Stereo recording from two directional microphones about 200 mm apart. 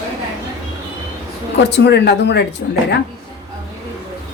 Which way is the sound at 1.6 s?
55° left (ahead or behind).